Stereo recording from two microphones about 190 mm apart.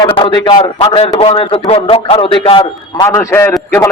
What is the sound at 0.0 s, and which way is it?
A man's voice, 25° left (ahead or behind).